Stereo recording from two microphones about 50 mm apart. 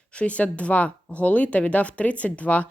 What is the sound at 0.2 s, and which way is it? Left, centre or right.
A woman's voice, left.